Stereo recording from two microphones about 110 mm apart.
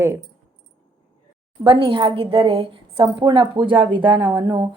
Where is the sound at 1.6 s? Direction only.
55° right (ahead or behind).